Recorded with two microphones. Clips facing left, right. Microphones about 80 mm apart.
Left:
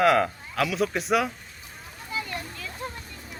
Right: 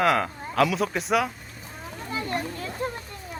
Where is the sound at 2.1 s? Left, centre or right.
Right.